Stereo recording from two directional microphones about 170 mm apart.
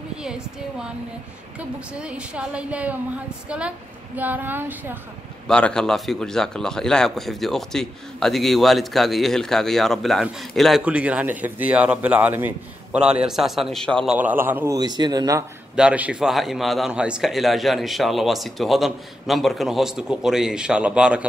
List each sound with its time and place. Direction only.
0.2 s a man's voice: 5° right (ahead or behind)
5.5 s a man's voice: 5° left (ahead or behind)
14.1 s a man's voice: 10° right (ahead or behind)
14.8 s speech: 25° right (ahead or behind)
15.7 s a man's voice: 5° right (ahead or behind)